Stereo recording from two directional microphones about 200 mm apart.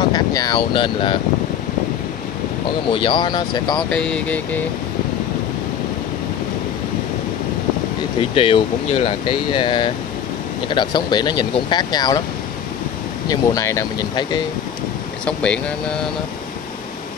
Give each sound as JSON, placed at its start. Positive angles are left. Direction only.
{"t": 0.1, "sound": "speech", "side_deg": 20}
{"t": 2.9, "sound": "speech", "side_deg": 25}
{"t": 3.9, "sound": "speech", "side_deg": 5}
{"t": 8.2, "sound": "speech", "side_deg": 25}
{"t": 13.3, "sound": "speech", "side_deg": 15}
{"t": 15.2, "sound": "speech", "side_deg": 5}